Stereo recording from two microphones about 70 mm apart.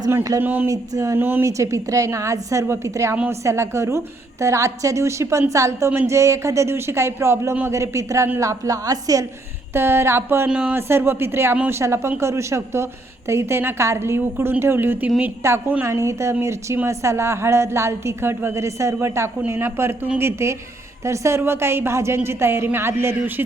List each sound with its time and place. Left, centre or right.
0.3 s speech: right
0.7 s a woman's voice: right
1.2 s a woman's voice: right
1.5 s a woman's voice: right
9.7 s a woman's voice: right
10.5 s speech: centre
10.8 s a woman's voice: right
15.4 s a woman's voice: right